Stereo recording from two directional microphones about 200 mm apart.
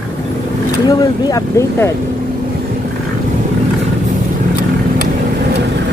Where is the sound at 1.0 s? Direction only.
20° left (ahead or behind).